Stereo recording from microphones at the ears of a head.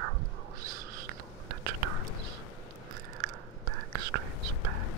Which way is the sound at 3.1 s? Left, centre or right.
Right.